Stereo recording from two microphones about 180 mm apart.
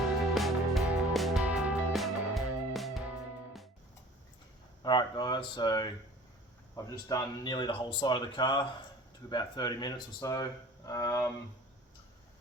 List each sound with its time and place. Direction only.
0.3 s music: centre (ahead or behind)
4.8 s speech: 25° left (ahead or behind)